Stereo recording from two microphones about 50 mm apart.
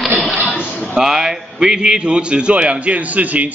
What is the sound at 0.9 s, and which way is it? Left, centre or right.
A man's voice, centre.